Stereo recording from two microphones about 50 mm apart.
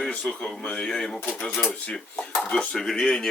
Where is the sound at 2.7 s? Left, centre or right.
Centre.